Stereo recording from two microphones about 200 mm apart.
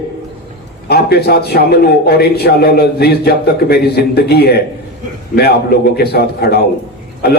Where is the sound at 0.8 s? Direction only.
55° left (ahead or behind).